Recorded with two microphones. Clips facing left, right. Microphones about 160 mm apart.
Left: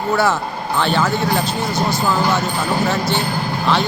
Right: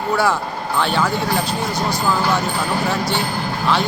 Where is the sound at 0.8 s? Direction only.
5° right (ahead or behind).